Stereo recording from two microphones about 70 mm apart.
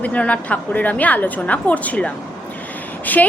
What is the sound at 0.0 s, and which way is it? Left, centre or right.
A woman's voice, left.